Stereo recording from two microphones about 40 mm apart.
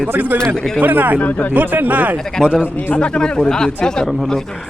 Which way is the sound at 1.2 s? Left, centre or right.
Left.